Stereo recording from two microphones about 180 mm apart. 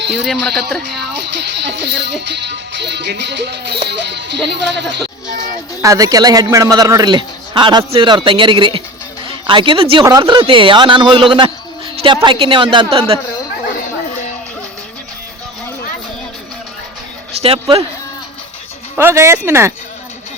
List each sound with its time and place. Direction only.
0.3 s speech: 5° left (ahead or behind)
1.6 s speech: 70° right (ahead or behind)
5.8 s speech: 20° right (ahead or behind)
10.0 s speech: 20° right (ahead or behind)
17.4 s speech: 35° right (ahead or behind)
18.9 s speech: 15° right (ahead or behind)